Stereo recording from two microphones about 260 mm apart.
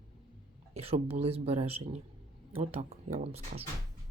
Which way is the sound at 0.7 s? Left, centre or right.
Right.